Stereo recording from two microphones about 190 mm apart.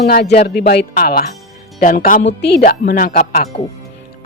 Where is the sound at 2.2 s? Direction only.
60° left (ahead or behind).